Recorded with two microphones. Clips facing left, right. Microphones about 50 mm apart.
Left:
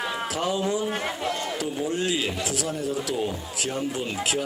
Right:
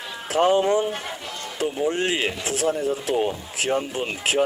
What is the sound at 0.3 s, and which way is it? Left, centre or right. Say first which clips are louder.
Speech: right 10 dB; right.